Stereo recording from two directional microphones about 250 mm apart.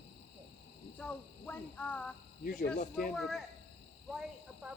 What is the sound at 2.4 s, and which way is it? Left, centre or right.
Speech, left.